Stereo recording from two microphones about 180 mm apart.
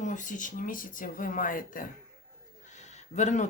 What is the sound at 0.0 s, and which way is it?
Speech, 45° left (ahead or behind).